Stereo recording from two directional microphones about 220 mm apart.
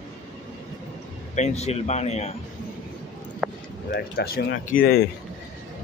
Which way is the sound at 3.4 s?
5° right (ahead or behind).